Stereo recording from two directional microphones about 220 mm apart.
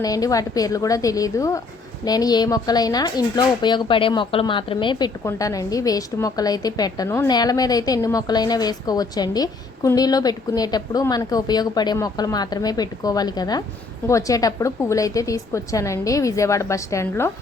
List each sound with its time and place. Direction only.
0.0 s speech: 15° left (ahead or behind)